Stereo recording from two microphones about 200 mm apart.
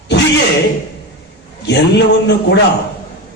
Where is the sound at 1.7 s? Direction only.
55° left (ahead or behind).